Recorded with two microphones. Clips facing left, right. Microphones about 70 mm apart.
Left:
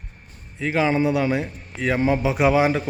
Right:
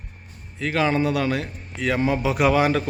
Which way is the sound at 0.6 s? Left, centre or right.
Left.